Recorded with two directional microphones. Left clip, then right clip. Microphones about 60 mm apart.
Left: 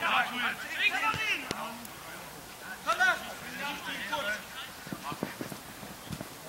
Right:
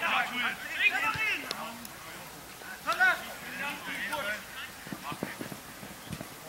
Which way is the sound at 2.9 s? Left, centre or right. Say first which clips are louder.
Right 1 dB; left.